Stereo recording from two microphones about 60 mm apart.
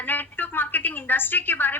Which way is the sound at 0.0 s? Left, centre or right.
Left.